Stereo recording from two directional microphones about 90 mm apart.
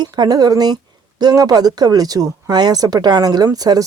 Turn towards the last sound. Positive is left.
turn(degrees=-45)  # may be behind; listen again after turning